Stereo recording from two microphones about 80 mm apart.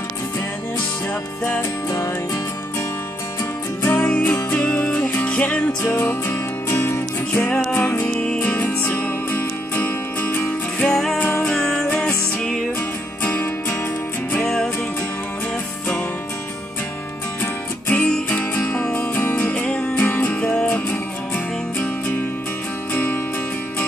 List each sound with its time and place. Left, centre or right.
1.4 s music: left
3.8 s music: left
5.9 s music: left
7.4 s music: centre
11.1 s music: left
11.4 s music: centre
14.3 s music: centre
17.4 s music: left